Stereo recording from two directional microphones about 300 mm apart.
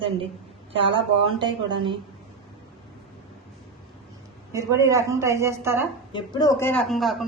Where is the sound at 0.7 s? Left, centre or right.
Centre.